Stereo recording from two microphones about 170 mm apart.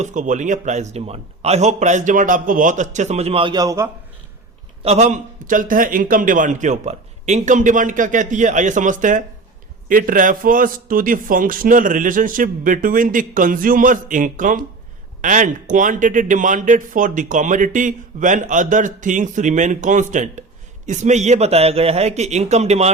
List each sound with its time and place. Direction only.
0.0 s speech: 45° right (ahead or behind); by 3.8 s 20° right (ahead or behind)
4.8 s a man's voice: 40° right (ahead or behind)